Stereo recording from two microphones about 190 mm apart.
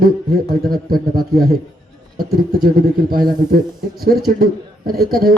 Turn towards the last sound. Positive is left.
turn(degrees=-50)  # may be behind; listen again after turning